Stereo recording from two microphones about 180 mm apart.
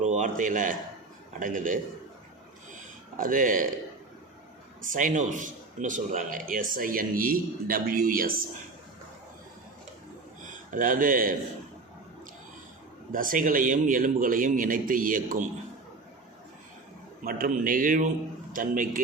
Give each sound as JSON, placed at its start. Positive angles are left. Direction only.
{"t": 0.0, "sound": "a man's voice", "side_deg": -40}
{"t": 3.2, "sound": "a man's voice", "side_deg": -50}
{"t": 4.9, "sound": "a man's voice", "side_deg": -45}
{"t": 10.7, "sound": "a man's voice", "side_deg": -50}
{"t": 13.1, "sound": "a man's voice", "side_deg": -50}
{"t": 17.2, "sound": "a man's voice", "side_deg": -50}